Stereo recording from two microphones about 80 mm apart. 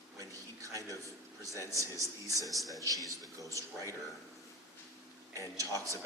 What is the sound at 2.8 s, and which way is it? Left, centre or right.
Speech, right.